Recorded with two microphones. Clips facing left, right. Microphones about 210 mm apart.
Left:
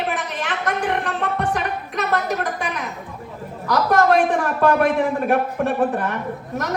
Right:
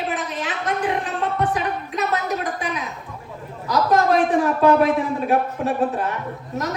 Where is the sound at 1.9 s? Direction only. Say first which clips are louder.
Left 2 dB; 60° left (ahead or behind).